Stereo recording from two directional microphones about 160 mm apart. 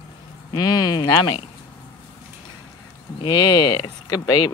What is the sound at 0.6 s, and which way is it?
Speech, 25° left (ahead or behind).